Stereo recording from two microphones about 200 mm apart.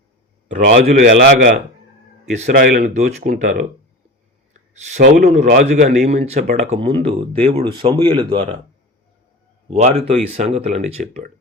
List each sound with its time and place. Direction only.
0.4 s speech: 40° right (ahead or behind)
4.7 s speech: 35° right (ahead or behind)
9.6 s speech: 30° right (ahead or behind)